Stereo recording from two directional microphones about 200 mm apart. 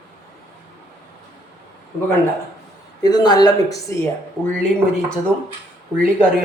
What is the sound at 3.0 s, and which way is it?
Speech, 20° left (ahead or behind).